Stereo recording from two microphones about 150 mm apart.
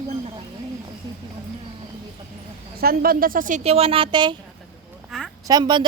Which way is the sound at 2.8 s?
85° right.